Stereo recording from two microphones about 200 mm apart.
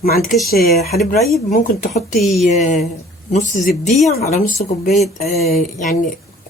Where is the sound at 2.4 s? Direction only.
35° left (ahead or behind).